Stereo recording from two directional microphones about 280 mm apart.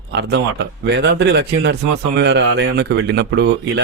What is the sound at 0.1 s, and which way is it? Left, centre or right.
Speech, right.